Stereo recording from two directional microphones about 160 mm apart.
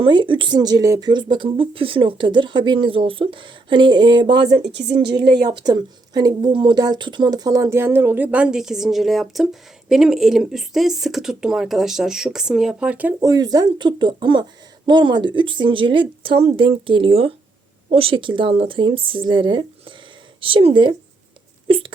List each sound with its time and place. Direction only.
0.0 s speech: 30° right (ahead or behind)
4.5 s a woman's voice: 90° right
5.5 s speech: 25° right (ahead or behind); by 13.1 s 10° right (ahead or behind)
13.1 s a woman's voice: 25° right (ahead or behind)